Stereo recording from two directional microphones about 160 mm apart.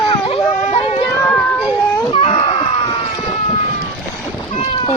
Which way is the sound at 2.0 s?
35° left (ahead or behind).